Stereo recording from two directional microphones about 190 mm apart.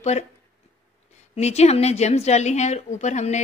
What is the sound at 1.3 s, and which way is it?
A woman's voice, 35° left (ahead or behind).